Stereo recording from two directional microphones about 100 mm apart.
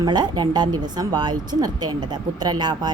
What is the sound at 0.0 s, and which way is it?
Speech, 45° right (ahead or behind).